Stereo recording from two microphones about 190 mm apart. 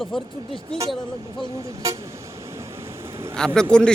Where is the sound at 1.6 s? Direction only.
20° right (ahead or behind).